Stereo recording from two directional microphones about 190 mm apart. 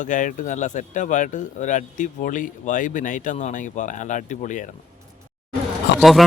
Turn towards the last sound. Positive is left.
turn(degrees=0)  # may be behind; listen again after turning